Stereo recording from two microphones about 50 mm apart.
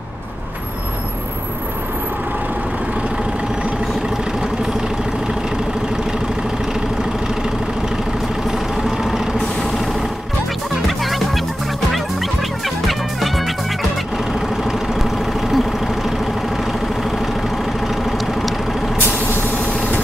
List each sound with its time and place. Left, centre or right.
8.9 s vehicle: centre
10.9 s music: centre
14.1 s vehicle: centre
17.8 s vehicle: centre
18.9 s vehicle: left